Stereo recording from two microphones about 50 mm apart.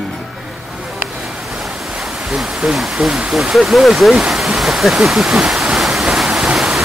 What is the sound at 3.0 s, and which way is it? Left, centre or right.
Speech, centre.